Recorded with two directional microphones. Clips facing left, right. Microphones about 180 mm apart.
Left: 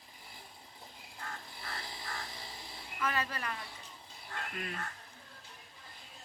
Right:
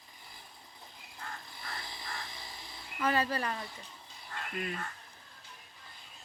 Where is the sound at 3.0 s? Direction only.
30° right (ahead or behind).